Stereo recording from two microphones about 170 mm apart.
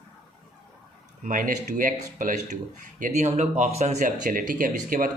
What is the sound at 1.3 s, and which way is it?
Speech, 55° right (ahead or behind).